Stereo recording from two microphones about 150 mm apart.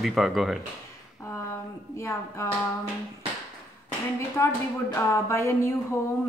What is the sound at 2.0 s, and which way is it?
Speech, 20° left (ahead or behind).